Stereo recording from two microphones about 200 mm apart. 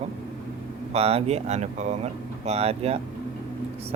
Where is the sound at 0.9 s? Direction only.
30° right (ahead or behind).